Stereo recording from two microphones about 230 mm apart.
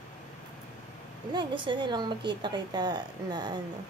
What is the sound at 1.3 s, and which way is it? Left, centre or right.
A woman's voice, centre.